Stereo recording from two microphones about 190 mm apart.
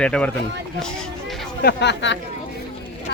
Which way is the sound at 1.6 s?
65° left (ahead or behind).